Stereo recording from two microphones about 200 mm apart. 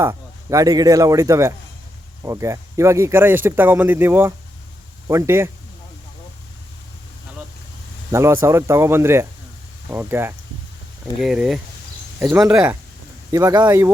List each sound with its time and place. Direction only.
0.0 s speech: 15° right (ahead or behind)
8.1 s speech: 15° right (ahead or behind)
13.3 s speech: 20° right (ahead or behind)